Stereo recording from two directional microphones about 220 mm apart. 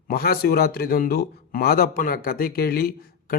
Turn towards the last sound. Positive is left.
turn(degrees=45)  # may be behind; listen again after turning